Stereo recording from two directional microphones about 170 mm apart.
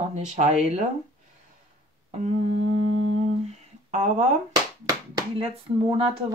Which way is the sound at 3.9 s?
45° right (ahead or behind).